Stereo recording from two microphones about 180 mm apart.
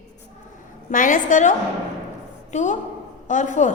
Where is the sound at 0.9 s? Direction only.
45° left (ahead or behind).